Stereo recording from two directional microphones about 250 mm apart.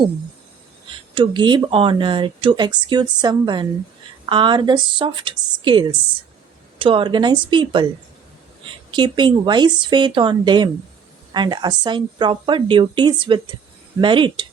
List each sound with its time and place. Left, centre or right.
1.1 s speech: centre